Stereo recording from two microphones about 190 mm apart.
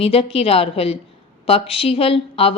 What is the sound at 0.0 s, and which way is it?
A woman's voice, 30° left (ahead or behind).